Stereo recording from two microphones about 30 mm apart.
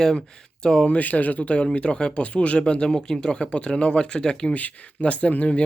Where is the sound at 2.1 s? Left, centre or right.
Left.